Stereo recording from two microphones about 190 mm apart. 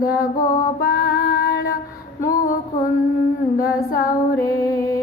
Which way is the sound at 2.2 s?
50° left (ahead or behind).